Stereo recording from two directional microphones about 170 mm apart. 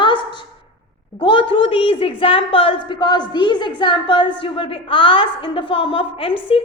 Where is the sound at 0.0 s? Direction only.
30° left (ahead or behind).